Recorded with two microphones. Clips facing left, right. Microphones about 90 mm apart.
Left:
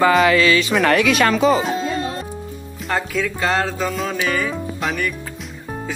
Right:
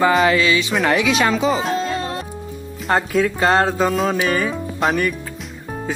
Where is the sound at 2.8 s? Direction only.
40° right (ahead or behind).